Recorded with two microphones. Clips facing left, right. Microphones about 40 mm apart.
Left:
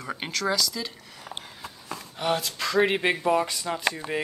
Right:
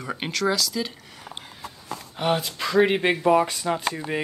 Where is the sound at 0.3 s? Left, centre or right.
Centre.